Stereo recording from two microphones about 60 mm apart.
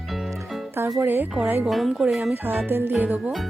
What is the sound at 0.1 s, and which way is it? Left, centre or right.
Music, centre.